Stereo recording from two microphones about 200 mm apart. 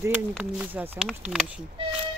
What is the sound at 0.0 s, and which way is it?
Speech, 10° right (ahead or behind).